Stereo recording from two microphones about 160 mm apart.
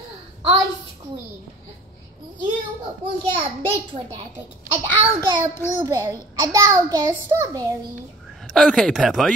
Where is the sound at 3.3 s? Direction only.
35° right (ahead or behind).